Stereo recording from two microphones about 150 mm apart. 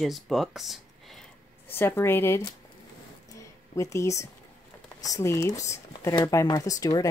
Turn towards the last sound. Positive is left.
turn(degrees=25)  # may be behind; listen again after turning